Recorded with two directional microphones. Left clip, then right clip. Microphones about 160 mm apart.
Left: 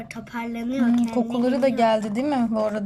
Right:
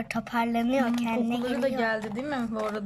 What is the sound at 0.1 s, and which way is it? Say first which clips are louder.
Speech: right 5 dB; 70° right (ahead or behind).